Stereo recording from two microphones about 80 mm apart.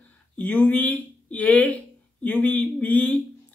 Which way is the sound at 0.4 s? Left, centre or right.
Left.